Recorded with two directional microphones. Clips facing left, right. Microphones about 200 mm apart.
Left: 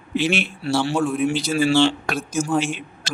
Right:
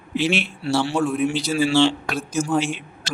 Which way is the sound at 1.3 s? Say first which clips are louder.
Left 1 dB; 50° left (ahead or behind).